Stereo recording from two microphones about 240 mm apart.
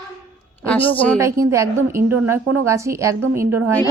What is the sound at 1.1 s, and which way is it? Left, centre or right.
A woman's voice, centre.